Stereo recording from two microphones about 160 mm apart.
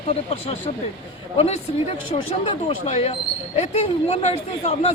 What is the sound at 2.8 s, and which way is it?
Speech, 50° left (ahead or behind).